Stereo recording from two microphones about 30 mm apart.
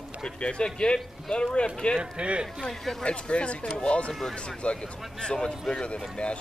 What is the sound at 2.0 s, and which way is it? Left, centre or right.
Speech, right.